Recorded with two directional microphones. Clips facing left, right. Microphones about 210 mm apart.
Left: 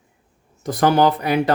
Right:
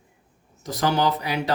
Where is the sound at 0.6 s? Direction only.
55° left (ahead or behind).